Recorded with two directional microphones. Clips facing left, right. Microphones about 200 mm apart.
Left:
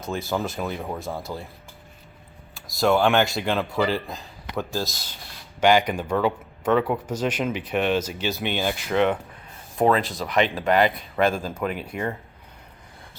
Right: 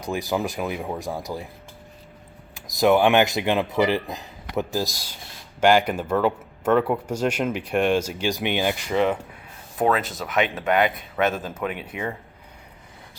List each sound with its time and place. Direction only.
0.0 s speech: 15° right (ahead or behind)
2.6 s speech: 15° right (ahead or behind)